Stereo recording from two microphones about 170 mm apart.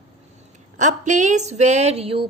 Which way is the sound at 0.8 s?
45° right (ahead or behind).